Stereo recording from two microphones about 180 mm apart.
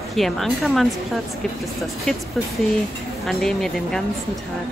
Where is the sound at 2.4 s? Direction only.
Centre (ahead or behind).